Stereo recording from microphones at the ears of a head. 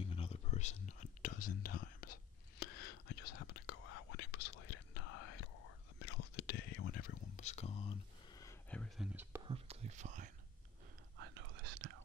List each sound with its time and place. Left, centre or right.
0.0 s whispering: left
9.5 s whispering: right